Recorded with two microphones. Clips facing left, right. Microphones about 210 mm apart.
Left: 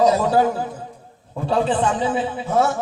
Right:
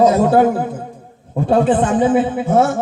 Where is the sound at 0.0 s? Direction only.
50° right (ahead or behind).